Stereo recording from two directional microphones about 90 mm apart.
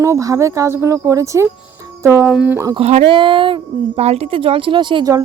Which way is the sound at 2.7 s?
65° right (ahead or behind).